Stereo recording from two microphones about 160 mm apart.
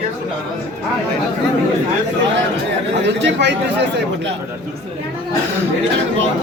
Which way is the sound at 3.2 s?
90° right.